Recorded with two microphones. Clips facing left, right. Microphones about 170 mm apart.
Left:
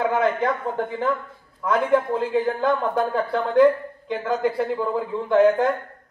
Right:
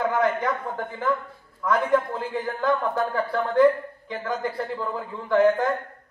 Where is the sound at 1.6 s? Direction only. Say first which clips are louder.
Left 2 dB; 20° left (ahead or behind).